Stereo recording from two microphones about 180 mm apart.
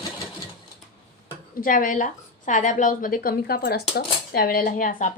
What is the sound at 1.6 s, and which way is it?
A woman's voice, 50° left (ahead or behind).